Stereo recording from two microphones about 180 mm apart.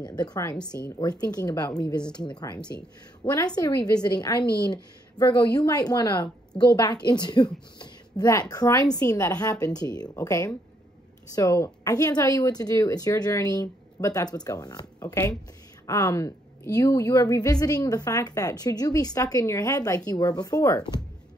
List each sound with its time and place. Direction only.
0.0 s a woman's voice: 25° left (ahead or behind)